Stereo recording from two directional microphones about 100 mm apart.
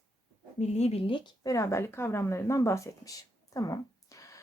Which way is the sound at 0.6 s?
90° left.